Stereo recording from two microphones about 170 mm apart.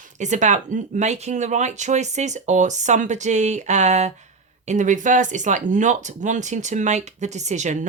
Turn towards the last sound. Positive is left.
turn(degrees=-45)  # may be behind; listen again after turning